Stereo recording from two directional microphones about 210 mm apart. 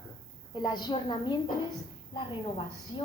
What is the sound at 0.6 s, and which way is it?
Speech, 20° left (ahead or behind).